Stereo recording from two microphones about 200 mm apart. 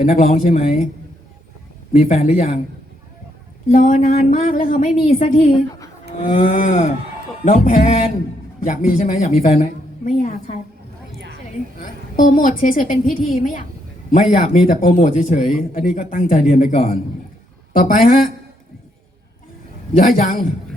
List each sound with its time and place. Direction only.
0.0 s a woman's voice: 40° left (ahead or behind)
1.9 s a woman's voice: 40° left (ahead or behind)
3.7 s a woman's voice: 40° left (ahead or behind)
11.8 s a woman's voice: 40° left (ahead or behind)
20.0 s a man's voice: 45° left (ahead or behind)